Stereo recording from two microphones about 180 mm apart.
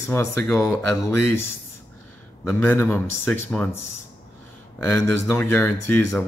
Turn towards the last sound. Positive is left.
turn(degrees=10)  # may be behind; listen again after turning